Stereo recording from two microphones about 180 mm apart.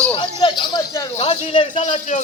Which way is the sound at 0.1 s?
25° left (ahead or behind).